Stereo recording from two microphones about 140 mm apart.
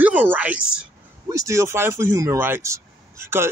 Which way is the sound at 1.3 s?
20° right (ahead or behind).